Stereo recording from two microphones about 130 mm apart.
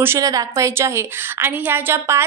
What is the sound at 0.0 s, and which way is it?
A woman's voice, 20° right (ahead or behind).